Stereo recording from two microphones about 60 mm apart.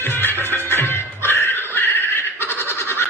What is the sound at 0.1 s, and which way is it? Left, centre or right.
Music, left.